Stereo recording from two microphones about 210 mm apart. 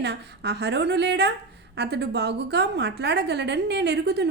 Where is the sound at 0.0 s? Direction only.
55° right (ahead or behind).